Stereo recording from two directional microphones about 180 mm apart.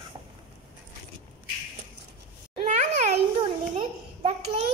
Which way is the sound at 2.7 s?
40° right (ahead or behind).